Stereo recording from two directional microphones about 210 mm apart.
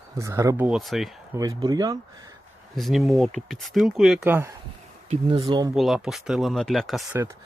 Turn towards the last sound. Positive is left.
turn(degrees=-10)  # may be behind; listen again after turning